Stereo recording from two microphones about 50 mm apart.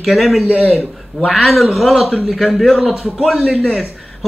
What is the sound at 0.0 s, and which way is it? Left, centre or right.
A man's voice, centre.